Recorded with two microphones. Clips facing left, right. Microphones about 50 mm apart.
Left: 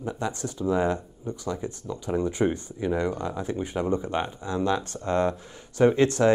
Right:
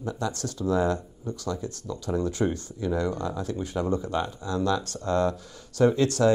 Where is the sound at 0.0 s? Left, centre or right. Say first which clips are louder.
Even; left.